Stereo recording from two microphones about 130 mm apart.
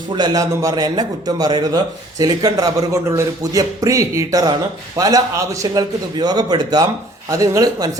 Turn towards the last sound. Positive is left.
turn(degrees=-30)  # may be behind; listen again after turning